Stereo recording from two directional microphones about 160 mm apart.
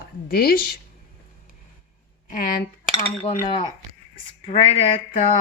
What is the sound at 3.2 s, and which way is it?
Speech, 30° left (ahead or behind).